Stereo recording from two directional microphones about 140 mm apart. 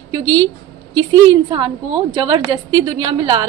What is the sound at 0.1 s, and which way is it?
A woman's voice, 30° right (ahead or behind).